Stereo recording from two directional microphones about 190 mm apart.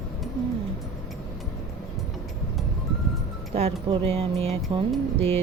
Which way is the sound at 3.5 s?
30° right (ahead or behind).